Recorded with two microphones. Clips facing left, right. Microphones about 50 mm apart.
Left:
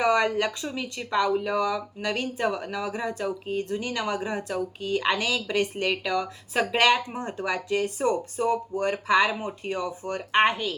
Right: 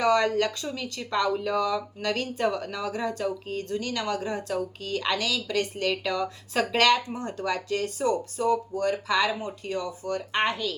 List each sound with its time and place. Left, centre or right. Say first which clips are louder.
0.0 s speech: even; centre
6.1 s speech: left 1 dB; centre
6.7 s speech: even; centre